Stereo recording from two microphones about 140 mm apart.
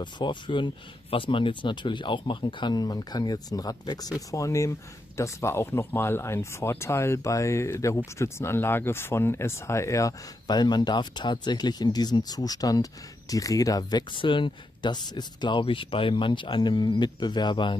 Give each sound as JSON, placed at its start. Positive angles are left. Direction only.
{"t": 0.0, "sound": "speech", "side_deg": 35}